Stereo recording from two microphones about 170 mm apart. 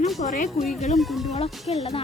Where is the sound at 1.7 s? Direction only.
35° left (ahead or behind).